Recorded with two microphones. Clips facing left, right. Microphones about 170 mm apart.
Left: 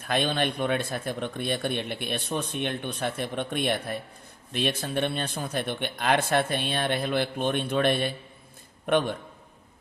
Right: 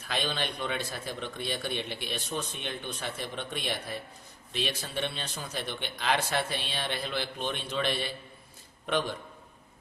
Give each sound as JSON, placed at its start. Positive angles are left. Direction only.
{"t": 0.0, "sound": "speech", "side_deg": 55}